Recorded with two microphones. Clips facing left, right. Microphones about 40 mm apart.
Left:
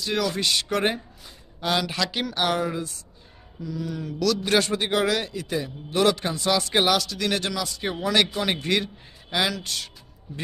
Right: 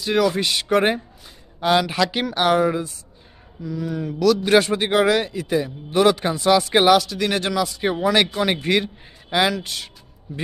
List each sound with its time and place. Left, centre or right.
0.0 s a man's voice: centre
3.6 s a man's voice: centre
10.3 s speech: centre